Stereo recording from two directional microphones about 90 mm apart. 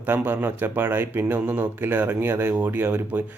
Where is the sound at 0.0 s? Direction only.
20° right (ahead or behind).